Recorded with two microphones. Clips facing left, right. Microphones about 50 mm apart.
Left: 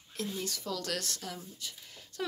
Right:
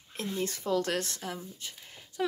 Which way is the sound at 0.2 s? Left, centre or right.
Right.